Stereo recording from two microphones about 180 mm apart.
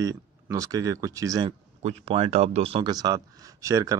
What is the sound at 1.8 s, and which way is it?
Speech, 30° right (ahead or behind).